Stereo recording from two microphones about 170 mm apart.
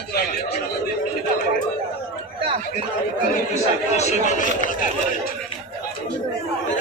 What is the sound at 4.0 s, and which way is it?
Speech, 45° left (ahead or behind).